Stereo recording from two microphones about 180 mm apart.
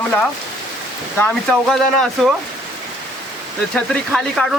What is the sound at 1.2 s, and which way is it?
Speech, centre (ahead or behind).